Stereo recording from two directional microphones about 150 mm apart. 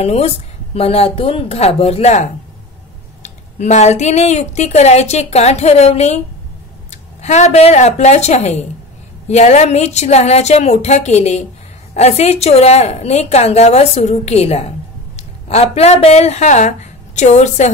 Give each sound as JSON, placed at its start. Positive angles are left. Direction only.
{"t": 0.0, "sound": "a woman's voice", "side_deg": 45}